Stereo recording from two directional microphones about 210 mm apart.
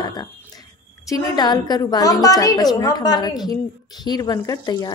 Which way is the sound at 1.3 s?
20° left (ahead or behind).